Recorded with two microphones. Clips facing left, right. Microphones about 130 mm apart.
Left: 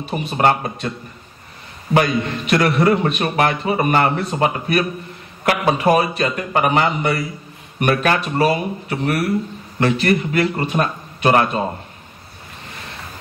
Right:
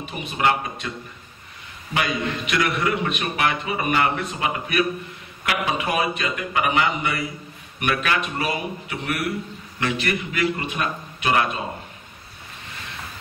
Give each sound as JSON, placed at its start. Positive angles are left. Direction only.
{"t": 0.0, "sound": "a man's voice", "side_deg": 35}
{"t": 2.0, "sound": "a man's voice", "side_deg": 40}